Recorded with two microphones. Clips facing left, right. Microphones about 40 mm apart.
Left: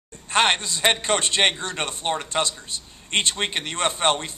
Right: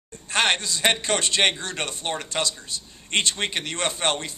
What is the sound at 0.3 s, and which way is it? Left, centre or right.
A man's voice, centre.